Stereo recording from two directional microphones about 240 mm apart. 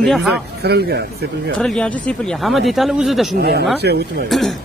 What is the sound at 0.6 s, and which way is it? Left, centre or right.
Speech, right.